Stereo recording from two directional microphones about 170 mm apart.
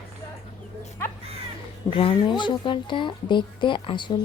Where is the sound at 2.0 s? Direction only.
30° left (ahead or behind).